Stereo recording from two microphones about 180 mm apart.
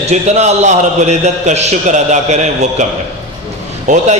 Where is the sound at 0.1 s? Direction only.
40° right (ahead or behind).